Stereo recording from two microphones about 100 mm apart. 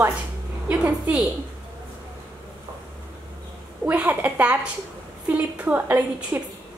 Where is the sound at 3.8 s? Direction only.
15° right (ahead or behind).